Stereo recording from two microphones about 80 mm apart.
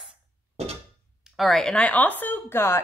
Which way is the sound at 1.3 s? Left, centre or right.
Centre.